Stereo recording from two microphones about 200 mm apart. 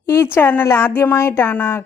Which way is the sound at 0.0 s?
10° left (ahead or behind).